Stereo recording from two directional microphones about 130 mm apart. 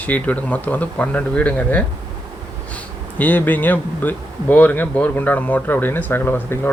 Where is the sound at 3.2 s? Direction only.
15° left (ahead or behind).